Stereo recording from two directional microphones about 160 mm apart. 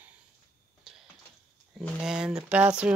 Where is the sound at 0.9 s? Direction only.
5° right (ahead or behind).